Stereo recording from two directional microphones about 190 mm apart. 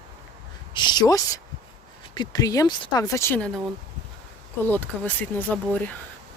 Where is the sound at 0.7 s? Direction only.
25° left (ahead or behind).